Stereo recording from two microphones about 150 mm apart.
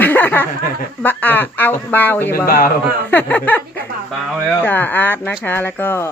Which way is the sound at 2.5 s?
70° left (ahead or behind).